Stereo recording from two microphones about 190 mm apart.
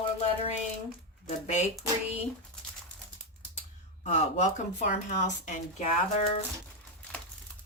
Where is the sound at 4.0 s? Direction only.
40° left (ahead or behind).